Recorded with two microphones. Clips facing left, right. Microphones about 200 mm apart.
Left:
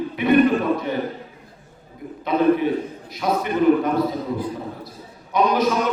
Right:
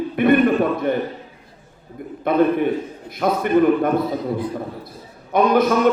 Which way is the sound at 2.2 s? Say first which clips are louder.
Right 1 dB; 55° right (ahead or behind).